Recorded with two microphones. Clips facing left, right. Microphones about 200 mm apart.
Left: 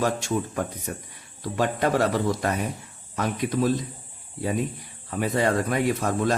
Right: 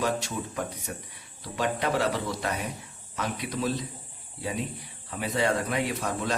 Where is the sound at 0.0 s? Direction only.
50° left (ahead or behind).